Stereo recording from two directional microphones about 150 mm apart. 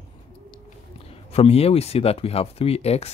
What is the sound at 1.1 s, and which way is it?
Speech, 40° left (ahead or behind).